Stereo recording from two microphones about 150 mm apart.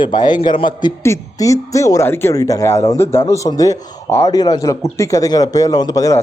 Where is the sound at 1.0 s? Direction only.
20° left (ahead or behind).